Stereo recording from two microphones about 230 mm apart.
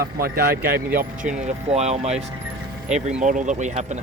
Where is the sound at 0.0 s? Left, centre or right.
Right.